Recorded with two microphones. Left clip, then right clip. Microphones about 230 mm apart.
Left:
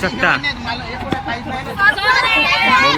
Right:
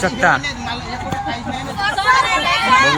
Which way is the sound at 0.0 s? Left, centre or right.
Centre.